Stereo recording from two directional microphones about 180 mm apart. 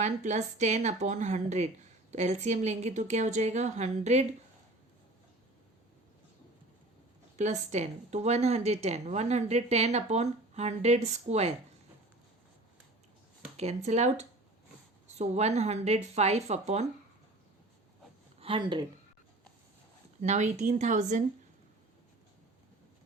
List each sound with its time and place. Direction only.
0.0 s a woman's voice: 40° right (ahead or behind)
7.3 s a woman's voice: 40° right (ahead or behind)
13.6 s a woman's voice: 40° right (ahead or behind)
18.3 s speech: 30° right (ahead or behind)
20.2 s a woman's voice: 40° right (ahead or behind)